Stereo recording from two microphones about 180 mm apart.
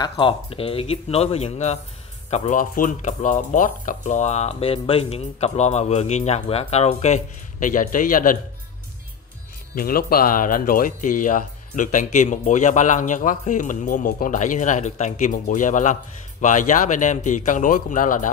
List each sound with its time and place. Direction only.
0.1 s speech: 30° left (ahead or behind); by 8.4 s 50° left (ahead or behind)
9.8 s speech: 55° left (ahead or behind)